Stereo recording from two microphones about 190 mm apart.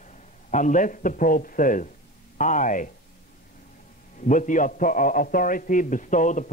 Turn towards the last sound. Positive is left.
turn(degrees=40)  # may be behind; listen again after turning